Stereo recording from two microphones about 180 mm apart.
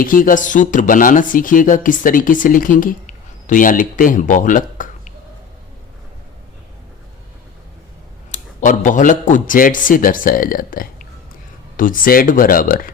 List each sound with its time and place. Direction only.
0.0 s speech: 50° left (ahead or behind)
8.3 s speech: 45° left (ahead or behind)